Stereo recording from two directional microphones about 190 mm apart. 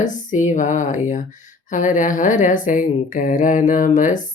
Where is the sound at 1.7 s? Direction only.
40° left (ahead or behind).